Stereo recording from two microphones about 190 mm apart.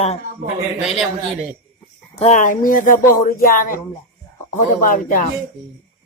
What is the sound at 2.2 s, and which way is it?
Speech, 35° left (ahead or behind).